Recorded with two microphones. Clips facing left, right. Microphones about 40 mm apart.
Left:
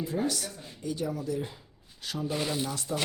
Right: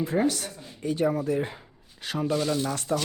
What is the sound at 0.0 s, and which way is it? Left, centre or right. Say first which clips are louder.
Speech: right 5 dB; right.